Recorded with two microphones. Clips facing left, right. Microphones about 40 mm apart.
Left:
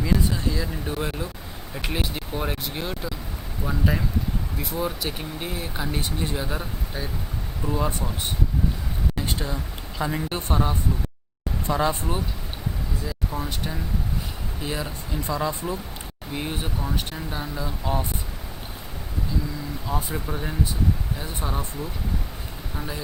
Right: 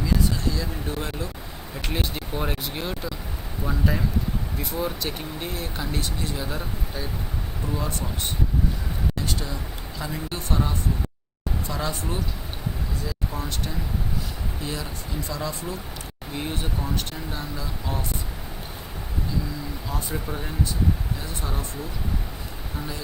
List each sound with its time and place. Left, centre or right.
0.0 s a sound: centre
1.7 s speech: centre
7.7 s a woman's voice: centre
9.1 s a woman's voice: centre
13.1 s speech: centre
14.6 s a woman's voice: centre
16.3 s a woman's voice: centre
19.9 s speech: centre